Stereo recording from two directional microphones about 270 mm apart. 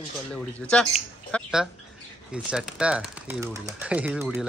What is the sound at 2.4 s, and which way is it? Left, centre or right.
Speech, centre.